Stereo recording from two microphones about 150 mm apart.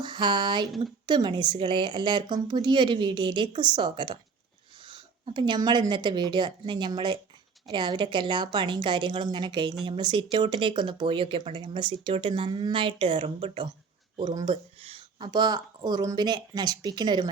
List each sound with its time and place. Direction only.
0.0 s a woman's voice: 30° right (ahead or behind)